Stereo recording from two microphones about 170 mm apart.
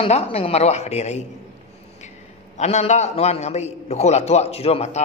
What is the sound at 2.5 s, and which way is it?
A man's voice, 40° left (ahead or behind).